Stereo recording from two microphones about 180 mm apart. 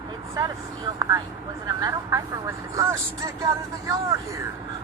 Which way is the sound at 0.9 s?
15° right (ahead or behind).